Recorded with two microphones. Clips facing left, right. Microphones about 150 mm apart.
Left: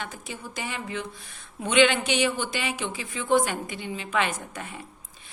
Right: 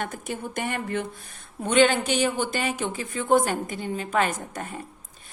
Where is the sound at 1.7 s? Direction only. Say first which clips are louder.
Right 1 dB; 40° right (ahead or behind).